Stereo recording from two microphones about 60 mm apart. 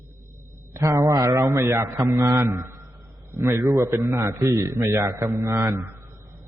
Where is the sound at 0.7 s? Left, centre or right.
Right.